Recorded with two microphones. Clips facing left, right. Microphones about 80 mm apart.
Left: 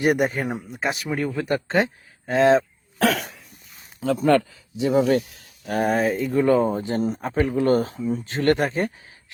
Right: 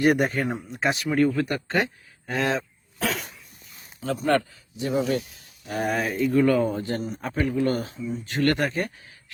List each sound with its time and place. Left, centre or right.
0.0 s speech: centre
0.7 s speech: centre
1.4 s speech: left
3.0 s cough: left
4.8 s speech: left
5.6 s speech: left
5.9 s speech: left
7.9 s speech: left
8.2 s speech: left